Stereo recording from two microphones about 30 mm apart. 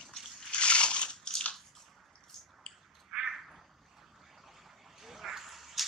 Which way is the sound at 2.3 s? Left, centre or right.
Centre.